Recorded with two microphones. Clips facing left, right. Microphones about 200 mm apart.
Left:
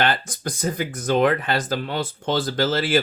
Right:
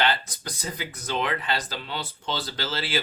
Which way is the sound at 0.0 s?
50° left (ahead or behind).